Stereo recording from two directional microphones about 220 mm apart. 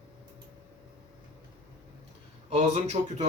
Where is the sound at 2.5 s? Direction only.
30° right (ahead or behind).